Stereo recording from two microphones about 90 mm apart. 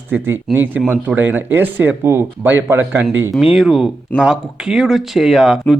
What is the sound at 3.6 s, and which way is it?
Speech, 5° right (ahead or behind).